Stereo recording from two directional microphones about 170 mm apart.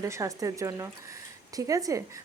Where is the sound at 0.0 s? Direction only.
20° right (ahead or behind).